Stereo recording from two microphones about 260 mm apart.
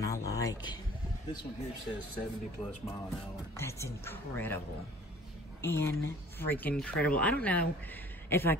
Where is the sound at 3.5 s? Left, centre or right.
Centre.